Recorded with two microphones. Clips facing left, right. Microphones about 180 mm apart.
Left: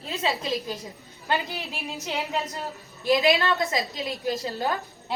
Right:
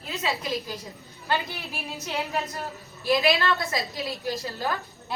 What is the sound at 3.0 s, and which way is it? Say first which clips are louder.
A woman's voice: left 2 dB; 20° left (ahead or behind).